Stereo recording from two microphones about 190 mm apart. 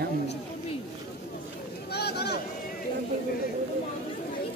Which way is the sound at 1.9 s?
60° left (ahead or behind).